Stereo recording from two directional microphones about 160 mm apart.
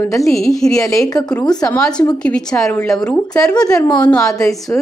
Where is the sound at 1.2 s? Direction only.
5° left (ahead or behind).